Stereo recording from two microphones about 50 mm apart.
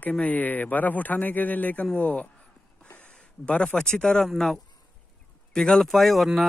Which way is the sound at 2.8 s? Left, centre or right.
Left.